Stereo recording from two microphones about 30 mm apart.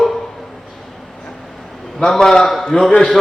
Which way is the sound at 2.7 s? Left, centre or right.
Left.